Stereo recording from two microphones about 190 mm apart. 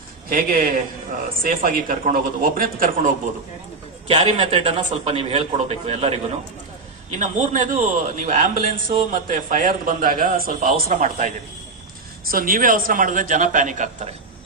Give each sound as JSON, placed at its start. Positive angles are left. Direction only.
{"t": 0.3, "sound": "a man's voice", "side_deg": -50}
{"t": 4.1, "sound": "a man's voice", "side_deg": -30}
{"t": 7.2, "sound": "a man's voice", "side_deg": -40}
{"t": 12.3, "sound": "a man's voice", "side_deg": -50}